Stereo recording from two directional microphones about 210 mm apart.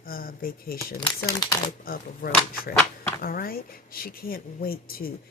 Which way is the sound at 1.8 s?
45° left (ahead or behind).